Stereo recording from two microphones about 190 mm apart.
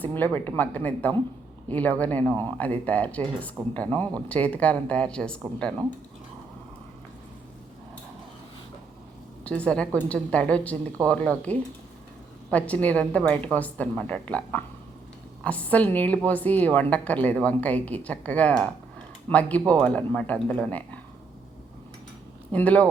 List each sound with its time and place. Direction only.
0.0 s a woman's voice: 10° left (ahead or behind)
9.4 s a woman's voice: 5° left (ahead or behind)
22.5 s a woman's voice: 5° left (ahead or behind)